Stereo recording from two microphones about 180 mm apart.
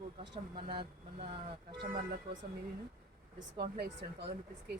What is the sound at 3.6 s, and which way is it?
Speech, 65° right (ahead or behind).